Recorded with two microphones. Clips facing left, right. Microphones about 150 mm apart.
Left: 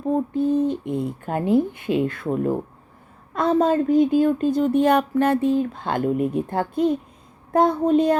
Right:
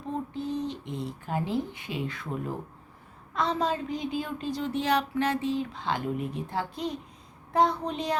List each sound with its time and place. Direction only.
0.1 s a woman's voice: 50° left (ahead or behind)